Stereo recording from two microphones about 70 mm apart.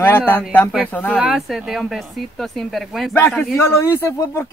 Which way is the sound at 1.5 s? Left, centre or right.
Centre.